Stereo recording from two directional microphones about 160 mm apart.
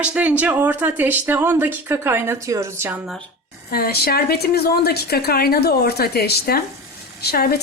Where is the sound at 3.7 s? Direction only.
75° left (ahead or behind).